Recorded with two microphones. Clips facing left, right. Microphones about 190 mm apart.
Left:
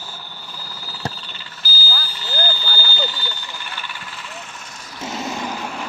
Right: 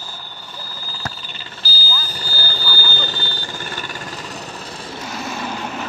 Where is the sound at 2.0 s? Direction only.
45° right (ahead or behind).